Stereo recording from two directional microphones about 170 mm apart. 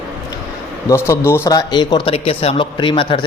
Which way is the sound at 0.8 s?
15° left (ahead or behind).